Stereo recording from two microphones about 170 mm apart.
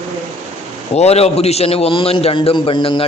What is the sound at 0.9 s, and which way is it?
A man's voice, 40° left (ahead or behind).